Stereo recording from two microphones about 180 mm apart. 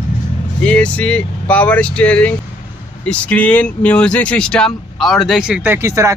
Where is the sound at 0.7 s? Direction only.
5° left (ahead or behind).